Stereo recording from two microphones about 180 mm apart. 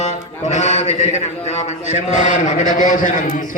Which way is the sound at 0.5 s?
35° left (ahead or behind).